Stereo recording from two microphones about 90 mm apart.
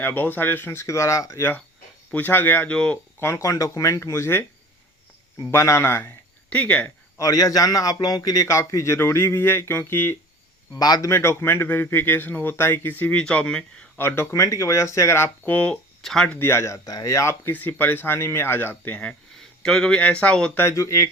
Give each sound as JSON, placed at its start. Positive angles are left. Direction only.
{"t": 0.0, "sound": "speech", "side_deg": 20}
{"t": 1.4, "sound": "speech", "side_deg": 25}
{"t": 2.7, "sound": "speech", "side_deg": 10}
{"t": 3.2, "sound": "a man's voice", "side_deg": 30}
{"t": 5.5, "sound": "speech", "side_deg": 30}
{"t": 7.2, "sound": "a man's voice", "side_deg": 40}
{"t": 10.8, "sound": "speech", "side_deg": 45}
{"t": 11.1, "sound": "speech", "side_deg": 30}
{"t": 14.0, "sound": "a man's voice", "side_deg": 25}
{"t": 15.5, "sound": "speech", "side_deg": 10}
{"t": 16.3, "sound": "speech", "side_deg": 25}
{"t": 16.8, "sound": "a man's voice", "side_deg": 40}
{"t": 17.5, "sound": "speech", "side_deg": 20}
{"t": 20.6, "sound": "a man's voice", "side_deg": 35}